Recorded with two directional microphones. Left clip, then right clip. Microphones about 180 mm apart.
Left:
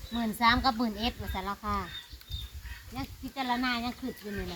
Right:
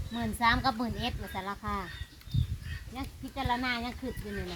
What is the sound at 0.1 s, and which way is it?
Speech, 20° left (ahead or behind).